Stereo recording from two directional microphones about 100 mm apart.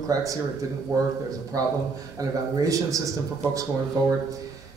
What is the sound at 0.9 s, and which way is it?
Speech, 30° right (ahead or behind).